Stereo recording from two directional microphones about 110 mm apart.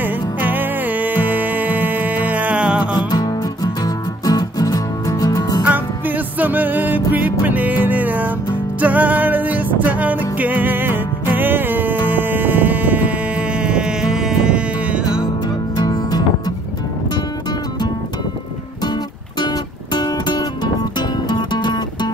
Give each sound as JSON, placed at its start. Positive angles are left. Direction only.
{"t": 0.0, "sound": "music", "side_deg": -15}
{"t": 3.0, "sound": "music", "side_deg": 40}
{"t": 5.7, "sound": "music", "side_deg": -15}
{"t": 15.7, "sound": "music", "side_deg": 40}
{"t": 19.4, "sound": "music", "side_deg": 40}